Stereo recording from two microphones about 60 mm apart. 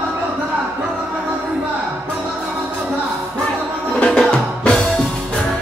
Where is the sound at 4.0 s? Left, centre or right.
Centre.